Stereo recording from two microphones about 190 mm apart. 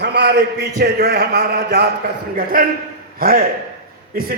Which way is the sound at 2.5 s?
50° right (ahead or behind).